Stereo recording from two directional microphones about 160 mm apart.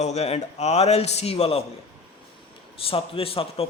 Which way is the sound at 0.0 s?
45° left (ahead or behind).